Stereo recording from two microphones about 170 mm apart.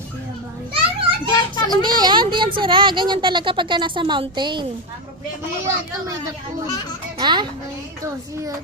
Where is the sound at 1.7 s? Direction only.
25° right (ahead or behind).